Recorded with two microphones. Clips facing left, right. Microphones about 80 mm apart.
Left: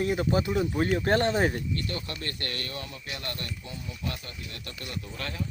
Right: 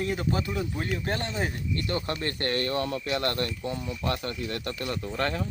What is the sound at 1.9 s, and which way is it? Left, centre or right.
Speech, right.